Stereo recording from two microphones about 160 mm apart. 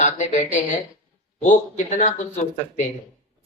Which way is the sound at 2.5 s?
50° left (ahead or behind).